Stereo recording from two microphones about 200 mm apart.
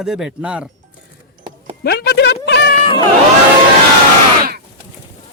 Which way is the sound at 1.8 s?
55° left (ahead or behind).